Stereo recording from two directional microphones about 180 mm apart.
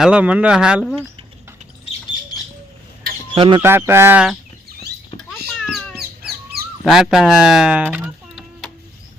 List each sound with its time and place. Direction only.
0.0 s speech: 5° right (ahead or behind)
3.3 s speech: 30° right (ahead or behind)
3.6 s speech: 10° right (ahead or behind)
5.3 s a sound: centre (ahead or behind)
6.8 s speech: centre (ahead or behind)